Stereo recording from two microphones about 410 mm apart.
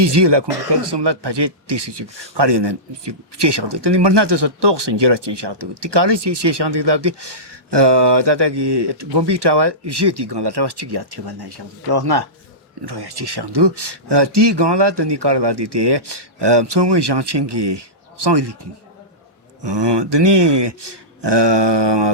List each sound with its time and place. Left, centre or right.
0.0 s speech: right
19.6 s speech: right